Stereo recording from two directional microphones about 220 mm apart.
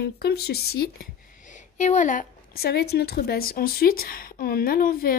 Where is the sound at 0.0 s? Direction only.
45° left (ahead or behind).